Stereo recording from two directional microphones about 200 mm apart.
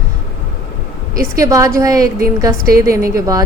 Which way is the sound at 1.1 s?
15° right (ahead or behind).